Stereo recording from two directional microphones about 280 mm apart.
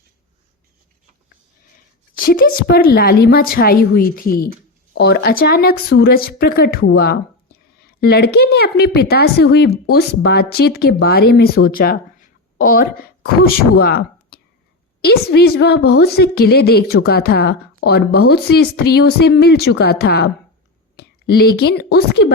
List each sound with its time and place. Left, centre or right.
2.1 s a woman's voice: left